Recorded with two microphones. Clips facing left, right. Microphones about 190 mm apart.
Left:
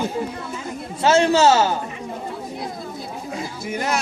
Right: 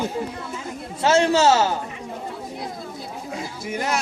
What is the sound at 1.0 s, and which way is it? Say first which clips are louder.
Speech: left 2 dB; 65° left (ahead or behind).